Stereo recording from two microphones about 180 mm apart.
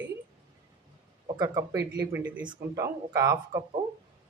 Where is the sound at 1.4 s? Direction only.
15° right (ahead or behind).